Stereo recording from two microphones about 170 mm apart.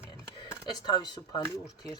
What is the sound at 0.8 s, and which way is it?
Speech, 25° left (ahead or behind).